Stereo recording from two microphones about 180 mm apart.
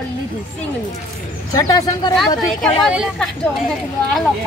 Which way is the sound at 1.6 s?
20° left (ahead or behind).